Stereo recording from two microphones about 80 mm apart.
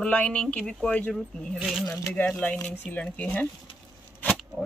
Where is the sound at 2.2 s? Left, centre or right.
Centre.